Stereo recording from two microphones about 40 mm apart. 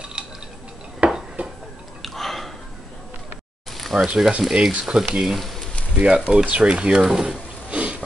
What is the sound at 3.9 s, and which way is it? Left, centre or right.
Speech, right.